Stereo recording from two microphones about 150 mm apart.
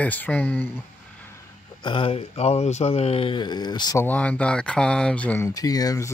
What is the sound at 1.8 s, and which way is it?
Speech, 35° left (ahead or behind).